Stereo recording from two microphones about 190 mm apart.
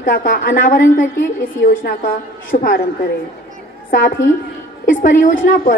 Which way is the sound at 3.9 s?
50° left (ahead or behind).